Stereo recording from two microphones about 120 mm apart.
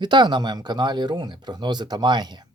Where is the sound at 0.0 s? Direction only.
40° right (ahead or behind).